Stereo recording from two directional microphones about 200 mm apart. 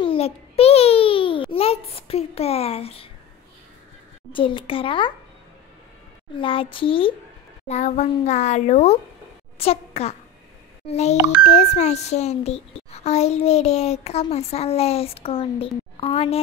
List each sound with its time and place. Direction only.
0.0 s a sound: 30° left (ahead or behind)
4.3 s a child's voice: 25° left (ahead or behind)
6.4 s a child's voice: 25° left (ahead or behind)